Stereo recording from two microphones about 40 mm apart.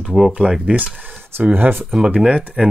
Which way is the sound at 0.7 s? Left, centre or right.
Right.